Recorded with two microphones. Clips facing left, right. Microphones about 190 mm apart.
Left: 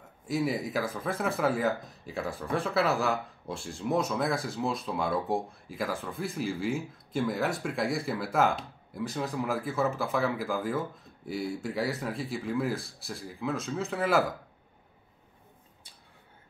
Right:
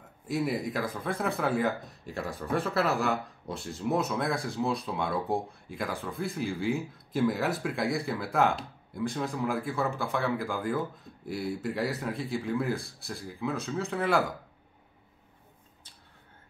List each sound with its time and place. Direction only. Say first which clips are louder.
0.3 s speech: even; centre (ahead or behind)